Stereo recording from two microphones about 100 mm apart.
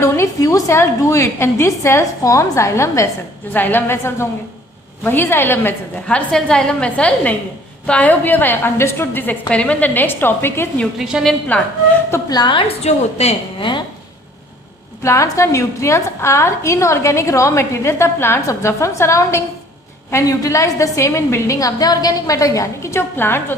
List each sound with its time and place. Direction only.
0.0 s a woman's voice: 30° left (ahead or behind)
3.5 s a woman's voice: 20° left (ahead or behind)
6.1 s a woman's voice: 10° left (ahead or behind)
10.9 s a woman's voice: 5° right (ahead or behind)
11.3 s a woman's voice: 10° left (ahead or behind)
12.3 s a woman's voice: 50° left (ahead or behind); by 13.7 s 90° left
15.0 s a woman's voice: 30° left (ahead or behind)